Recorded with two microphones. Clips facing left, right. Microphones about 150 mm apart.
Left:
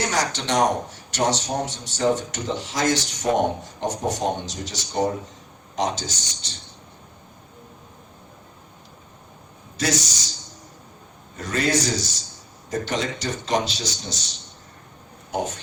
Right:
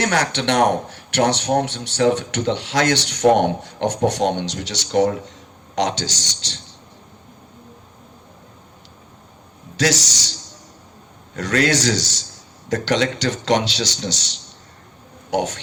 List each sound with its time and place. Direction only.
0.0 s speech: 65° right (ahead or behind)
5.7 s a man's voice: 90° right
9.7 s a man's voice: 80° right
11.3 s a man's voice: 90° right